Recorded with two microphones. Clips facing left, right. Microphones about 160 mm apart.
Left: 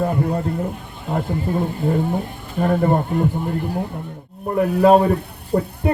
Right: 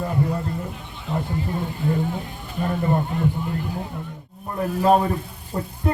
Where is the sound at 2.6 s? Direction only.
60° left (ahead or behind).